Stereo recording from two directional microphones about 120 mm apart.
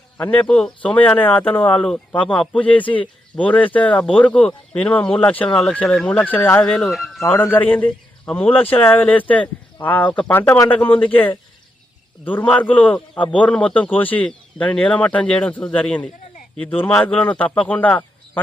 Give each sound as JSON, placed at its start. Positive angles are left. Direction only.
{"t": 0.2, "sound": "speech", "side_deg": 15}
{"t": 0.4, "sound": "speech", "side_deg": 5}
{"t": 7.2, "sound": "speech", "side_deg": 20}
{"t": 10.4, "sound": "speech", "side_deg": 20}
{"t": 12.2, "sound": "speech", "side_deg": 15}